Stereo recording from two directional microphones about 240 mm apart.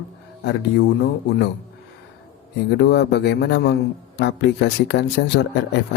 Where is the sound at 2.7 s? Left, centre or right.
Left.